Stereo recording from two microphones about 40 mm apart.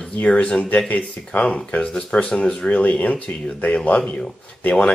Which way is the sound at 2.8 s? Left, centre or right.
Left.